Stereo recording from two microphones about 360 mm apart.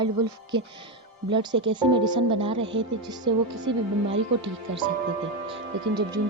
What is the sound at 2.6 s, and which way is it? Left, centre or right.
Speech, right.